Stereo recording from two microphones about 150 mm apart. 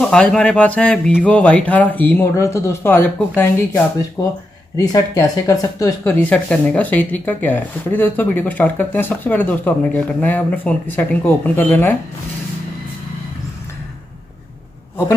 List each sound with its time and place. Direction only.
0.0 s speech: 5° left (ahead or behind)